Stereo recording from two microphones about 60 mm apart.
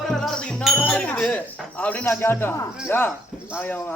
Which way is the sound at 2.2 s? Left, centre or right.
Left.